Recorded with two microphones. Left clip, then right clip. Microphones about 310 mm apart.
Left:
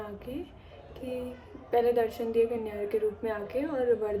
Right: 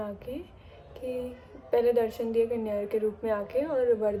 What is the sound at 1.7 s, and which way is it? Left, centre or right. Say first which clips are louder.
A woman's voice: right 1 dB; centre.